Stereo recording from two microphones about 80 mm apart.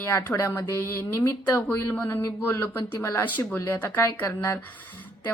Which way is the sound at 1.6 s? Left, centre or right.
Centre.